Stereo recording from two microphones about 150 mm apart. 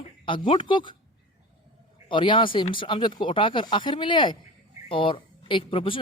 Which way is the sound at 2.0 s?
35° left (ahead or behind).